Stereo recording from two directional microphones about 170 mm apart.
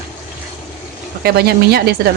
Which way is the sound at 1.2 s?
70° right (ahead or behind).